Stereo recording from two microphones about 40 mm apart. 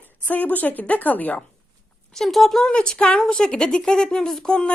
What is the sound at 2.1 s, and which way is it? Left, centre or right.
Speech, centre.